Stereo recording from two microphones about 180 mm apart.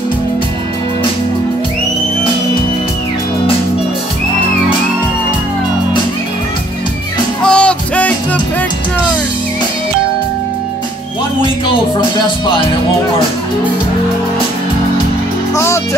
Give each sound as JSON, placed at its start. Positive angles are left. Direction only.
{"t": 7.4, "sound": "music", "side_deg": 5}
{"t": 15.5, "sound": "music", "side_deg": 15}